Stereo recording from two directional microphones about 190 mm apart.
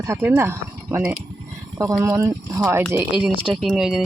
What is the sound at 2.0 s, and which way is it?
Speech, 15° right (ahead or behind).